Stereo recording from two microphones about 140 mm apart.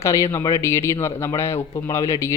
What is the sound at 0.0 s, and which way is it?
Speech, 20° left (ahead or behind).